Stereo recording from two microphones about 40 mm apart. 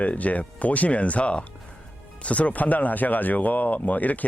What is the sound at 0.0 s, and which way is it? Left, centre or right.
Speech, left.